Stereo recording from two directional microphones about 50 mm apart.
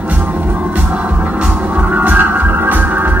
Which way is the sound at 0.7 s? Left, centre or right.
Right.